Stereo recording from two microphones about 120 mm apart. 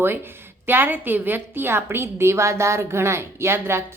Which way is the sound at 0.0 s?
20° right (ahead or behind).